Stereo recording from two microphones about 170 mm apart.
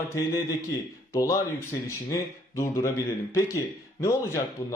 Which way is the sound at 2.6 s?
20° left (ahead or behind).